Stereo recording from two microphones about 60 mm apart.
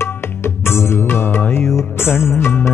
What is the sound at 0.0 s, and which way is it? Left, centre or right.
Music, left.